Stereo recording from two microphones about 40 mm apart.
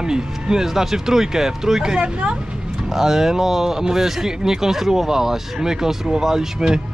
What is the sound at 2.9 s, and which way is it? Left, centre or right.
Speech, centre.